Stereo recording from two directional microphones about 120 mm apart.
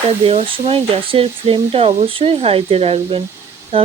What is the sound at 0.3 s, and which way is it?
Speech, 50° right (ahead or behind).